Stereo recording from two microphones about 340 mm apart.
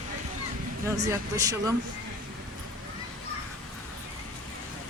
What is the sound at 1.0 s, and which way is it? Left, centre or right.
Speech, centre.